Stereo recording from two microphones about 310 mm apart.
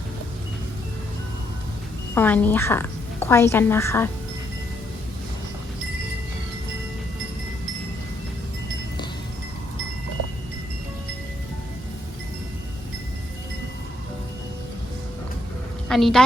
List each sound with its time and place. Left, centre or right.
2.1 s a woman's voice: centre
15.9 s a woman's voice: centre